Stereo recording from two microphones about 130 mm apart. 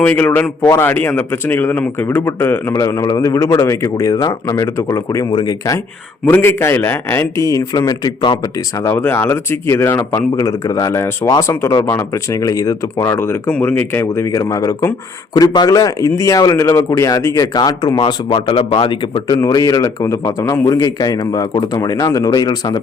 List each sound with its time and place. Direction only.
0.0 s a man's voice: 10° left (ahead or behind); by 19.2 s 40° left (ahead or behind)
19.3 s a man's voice: 30° left (ahead or behind)